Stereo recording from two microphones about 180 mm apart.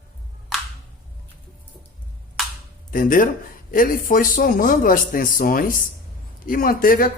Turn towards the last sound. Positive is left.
turn(degrees=50)  # may be behind; listen again after turning